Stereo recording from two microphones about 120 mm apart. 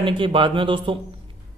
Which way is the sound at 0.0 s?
45° right (ahead or behind).